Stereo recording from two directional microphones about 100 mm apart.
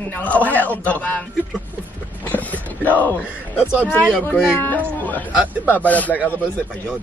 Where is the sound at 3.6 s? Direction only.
10° right (ahead or behind).